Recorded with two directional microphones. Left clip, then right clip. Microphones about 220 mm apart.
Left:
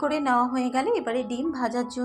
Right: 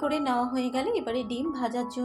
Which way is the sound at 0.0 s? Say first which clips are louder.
Left 4 dB; 15° left (ahead or behind).